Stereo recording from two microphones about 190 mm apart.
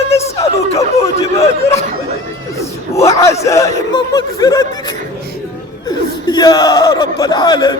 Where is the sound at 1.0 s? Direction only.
15° left (ahead or behind).